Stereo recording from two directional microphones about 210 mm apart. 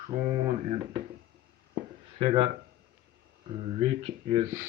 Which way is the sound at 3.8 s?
25° right (ahead or behind).